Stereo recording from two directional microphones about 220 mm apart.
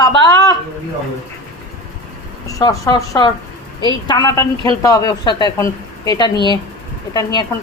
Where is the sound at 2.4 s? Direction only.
15° left (ahead or behind).